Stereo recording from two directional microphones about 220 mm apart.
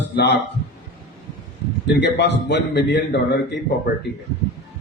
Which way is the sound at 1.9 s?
50° left (ahead or behind).